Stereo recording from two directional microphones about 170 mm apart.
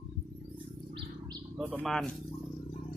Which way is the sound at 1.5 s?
10° right (ahead or behind).